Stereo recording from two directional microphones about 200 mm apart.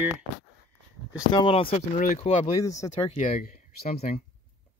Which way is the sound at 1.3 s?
25° left (ahead or behind).